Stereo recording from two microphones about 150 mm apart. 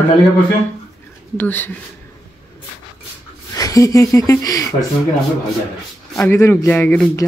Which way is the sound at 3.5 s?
25° left (ahead or behind).